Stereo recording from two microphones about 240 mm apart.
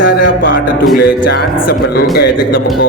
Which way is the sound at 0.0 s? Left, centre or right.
Left.